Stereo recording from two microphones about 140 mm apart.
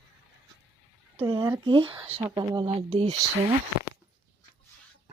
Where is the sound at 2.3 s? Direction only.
30° right (ahead or behind).